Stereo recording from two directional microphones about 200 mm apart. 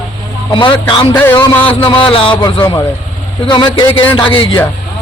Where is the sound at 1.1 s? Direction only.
10° left (ahead or behind).